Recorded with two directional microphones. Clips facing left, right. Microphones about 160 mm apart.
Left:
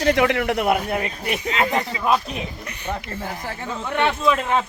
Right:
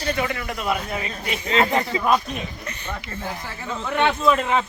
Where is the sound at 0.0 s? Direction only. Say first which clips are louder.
Left 7 dB; 85° left; by 1.4 s 60° left (ahead or behind).